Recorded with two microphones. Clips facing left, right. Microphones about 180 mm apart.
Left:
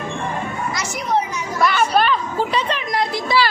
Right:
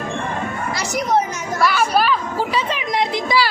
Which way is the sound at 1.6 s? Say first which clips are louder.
Even; 5° right (ahead or behind).